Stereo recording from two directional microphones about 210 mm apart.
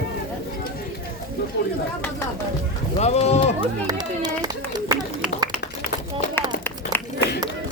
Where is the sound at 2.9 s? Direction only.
30° left (ahead or behind).